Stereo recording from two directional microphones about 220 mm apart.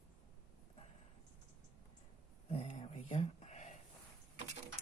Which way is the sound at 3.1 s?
30° left (ahead or behind).